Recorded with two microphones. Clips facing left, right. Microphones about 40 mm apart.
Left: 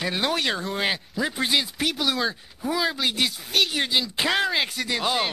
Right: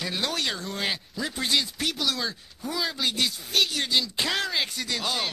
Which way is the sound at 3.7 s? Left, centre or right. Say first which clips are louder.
Left 2 dB; centre.